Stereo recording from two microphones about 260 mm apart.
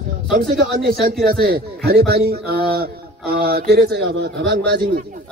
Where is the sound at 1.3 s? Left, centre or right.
Right.